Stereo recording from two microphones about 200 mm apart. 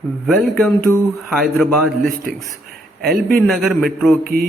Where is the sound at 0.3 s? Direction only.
Centre (ahead or behind).